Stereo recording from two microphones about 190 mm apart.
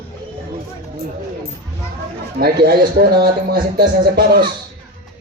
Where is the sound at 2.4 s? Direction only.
50° right (ahead or behind).